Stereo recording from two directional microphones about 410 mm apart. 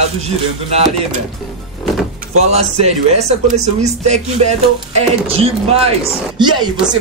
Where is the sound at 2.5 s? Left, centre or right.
Centre.